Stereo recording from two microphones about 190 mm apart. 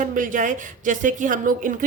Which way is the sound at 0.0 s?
45° right (ahead or behind).